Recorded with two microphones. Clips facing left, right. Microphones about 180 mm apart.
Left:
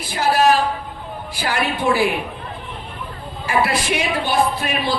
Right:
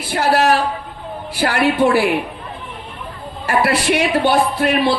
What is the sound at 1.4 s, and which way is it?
Speech, 65° right (ahead or behind).